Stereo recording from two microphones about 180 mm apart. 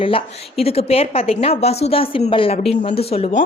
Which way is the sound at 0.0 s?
30° left (ahead or behind).